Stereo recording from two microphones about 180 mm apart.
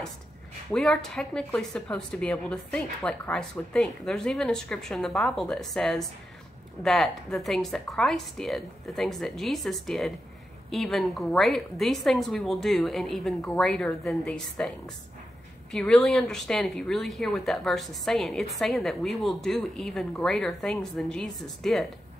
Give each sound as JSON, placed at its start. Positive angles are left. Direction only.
{"t": 0.7, "sound": "speech", "side_deg": 0}
{"t": 15.7, "sound": "speech", "side_deg": 0}